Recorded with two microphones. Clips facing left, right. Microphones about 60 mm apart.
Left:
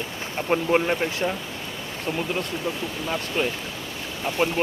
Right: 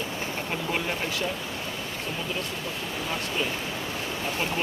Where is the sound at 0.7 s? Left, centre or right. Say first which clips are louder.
Left 6 dB; left.